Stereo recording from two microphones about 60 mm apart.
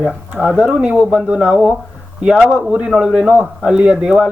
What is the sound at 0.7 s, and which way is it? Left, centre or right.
A man's voice, centre.